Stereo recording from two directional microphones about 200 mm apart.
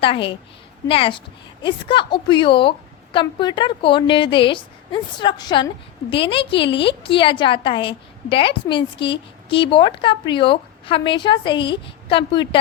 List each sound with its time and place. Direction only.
0.0 s a woman's voice: 25° left (ahead or behind)